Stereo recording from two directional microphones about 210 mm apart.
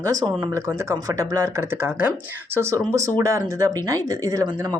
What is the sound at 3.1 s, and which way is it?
Speech, 15° right (ahead or behind).